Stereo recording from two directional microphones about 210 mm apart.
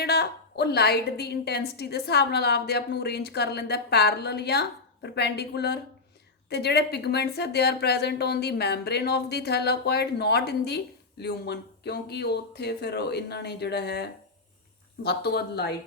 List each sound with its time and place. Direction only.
0.0 s a woman's voice: 50° left (ahead or behind)